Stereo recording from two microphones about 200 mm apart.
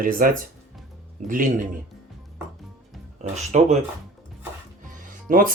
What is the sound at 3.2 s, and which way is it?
Speech, 35° right (ahead or behind).